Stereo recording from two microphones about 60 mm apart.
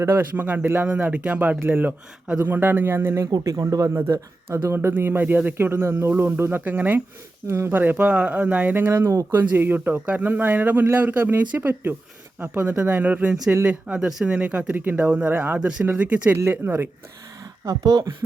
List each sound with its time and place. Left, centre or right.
0.2 s speech: right
0.9 s speech: right
3.4 s speech: right
3.9 s speech: right
5.7 s speech: right
7.4 s speech: right
12.4 s speech: right
14.3 s speech: right
15.5 s speech: centre
16.5 s speech: right
17.7 s speech: right